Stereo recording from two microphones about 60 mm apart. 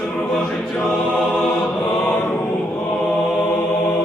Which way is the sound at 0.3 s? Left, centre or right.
Centre.